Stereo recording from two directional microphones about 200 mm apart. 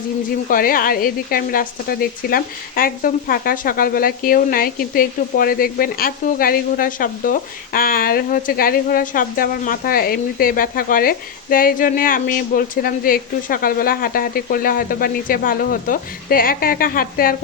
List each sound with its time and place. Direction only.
0.5 s speech: 45° left (ahead or behind)